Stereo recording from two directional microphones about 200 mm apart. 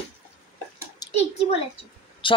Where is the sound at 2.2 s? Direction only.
25° left (ahead or behind).